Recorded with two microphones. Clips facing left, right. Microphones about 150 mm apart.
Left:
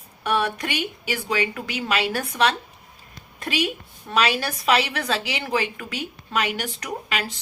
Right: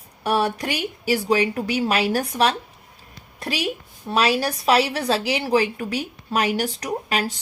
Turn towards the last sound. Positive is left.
turn(degrees=-40)  # may be behind; listen again after turning